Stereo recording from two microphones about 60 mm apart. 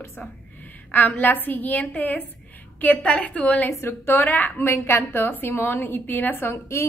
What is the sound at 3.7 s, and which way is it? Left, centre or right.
Speech, left.